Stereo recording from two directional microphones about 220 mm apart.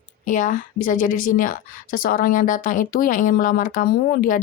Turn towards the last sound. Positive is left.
turn(degrees=40)  # may be behind; listen again after turning